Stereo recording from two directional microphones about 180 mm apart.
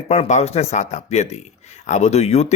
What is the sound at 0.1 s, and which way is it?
Speech, 40° left (ahead or behind).